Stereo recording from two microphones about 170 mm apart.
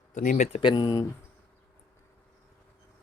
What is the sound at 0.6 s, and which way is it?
Speech, 25° left (ahead or behind).